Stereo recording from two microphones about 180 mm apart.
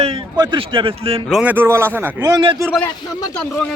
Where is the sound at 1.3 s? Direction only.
5° right (ahead or behind).